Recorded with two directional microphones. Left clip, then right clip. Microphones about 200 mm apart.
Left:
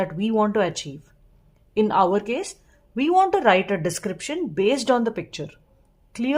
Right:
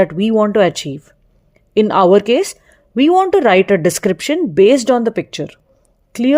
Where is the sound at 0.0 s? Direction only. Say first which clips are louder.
Right 9 dB; 35° right (ahead or behind).